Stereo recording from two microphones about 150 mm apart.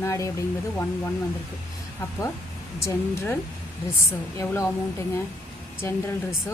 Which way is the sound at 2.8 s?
15° left (ahead or behind).